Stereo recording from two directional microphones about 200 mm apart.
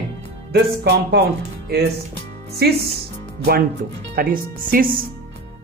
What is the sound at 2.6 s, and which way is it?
Speech, 50° right (ahead or behind).